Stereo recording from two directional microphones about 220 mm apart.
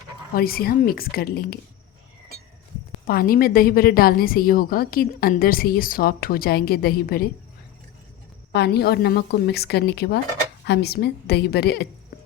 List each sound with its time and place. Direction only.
0.3 s a woman's voice: 45° left (ahead or behind)
3.1 s a woman's voice: 40° left (ahead or behind)
8.5 s a woman's voice: 50° left (ahead or behind)